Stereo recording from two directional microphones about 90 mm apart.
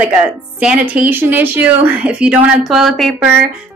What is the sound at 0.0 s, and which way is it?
Speech, 15° right (ahead or behind).